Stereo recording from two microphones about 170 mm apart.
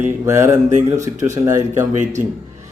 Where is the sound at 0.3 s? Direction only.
15° right (ahead or behind).